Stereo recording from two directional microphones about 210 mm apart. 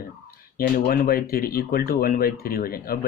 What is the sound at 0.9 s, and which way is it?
Speech, 45° left (ahead or behind).